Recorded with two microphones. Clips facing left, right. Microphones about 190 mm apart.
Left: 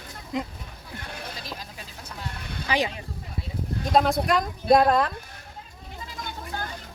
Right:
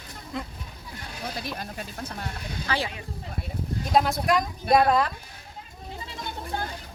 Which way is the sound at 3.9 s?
5° right (ahead or behind).